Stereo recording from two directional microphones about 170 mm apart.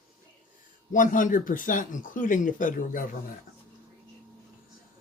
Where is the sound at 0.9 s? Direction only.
50° left (ahead or behind).